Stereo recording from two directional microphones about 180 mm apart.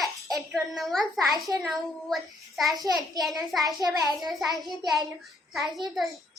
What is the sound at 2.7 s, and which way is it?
Speech, 20° right (ahead or behind).